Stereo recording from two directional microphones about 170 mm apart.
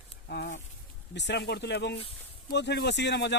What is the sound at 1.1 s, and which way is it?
Speech, 85° left.